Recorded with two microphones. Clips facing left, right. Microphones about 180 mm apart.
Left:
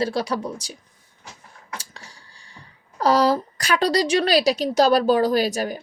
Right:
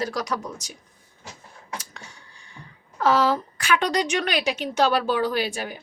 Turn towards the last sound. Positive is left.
turn(degrees=40)  # may be behind; listen again after turning